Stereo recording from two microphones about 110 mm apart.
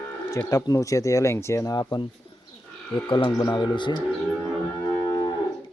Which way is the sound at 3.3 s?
35° left (ahead or behind).